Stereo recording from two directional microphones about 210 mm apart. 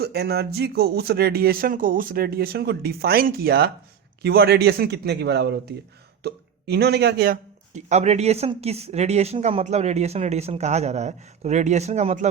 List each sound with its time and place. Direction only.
0.0 s speech: 50° right (ahead or behind); by 12.3 s 35° right (ahead or behind)